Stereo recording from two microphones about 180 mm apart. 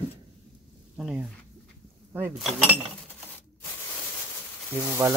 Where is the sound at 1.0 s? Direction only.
5° right (ahead or behind).